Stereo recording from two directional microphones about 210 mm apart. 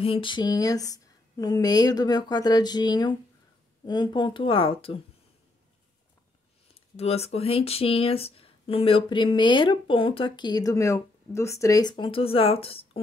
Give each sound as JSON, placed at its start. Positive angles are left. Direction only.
{"t": 0.0, "sound": "speech", "side_deg": 25}
{"t": 6.7, "sound": "speech", "side_deg": 30}